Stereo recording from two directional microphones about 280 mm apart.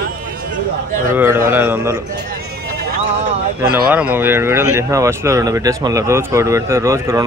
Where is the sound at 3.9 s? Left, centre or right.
Centre.